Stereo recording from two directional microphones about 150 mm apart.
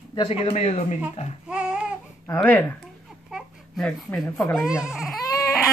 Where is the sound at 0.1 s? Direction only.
35° left (ahead or behind).